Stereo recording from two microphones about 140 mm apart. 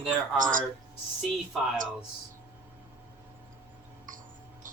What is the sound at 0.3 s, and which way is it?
Speech, 70° right (ahead or behind).